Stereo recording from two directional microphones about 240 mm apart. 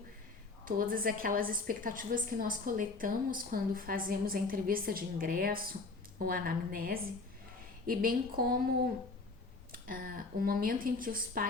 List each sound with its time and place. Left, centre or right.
0.6 s a woman's voice: right
9.7 s a woman's voice: right